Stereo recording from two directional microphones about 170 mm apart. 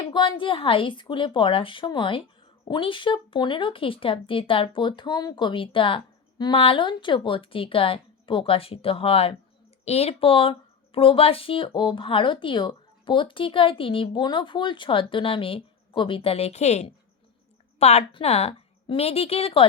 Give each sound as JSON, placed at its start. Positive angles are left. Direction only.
{"t": 0.1, "sound": "speech", "side_deg": 30}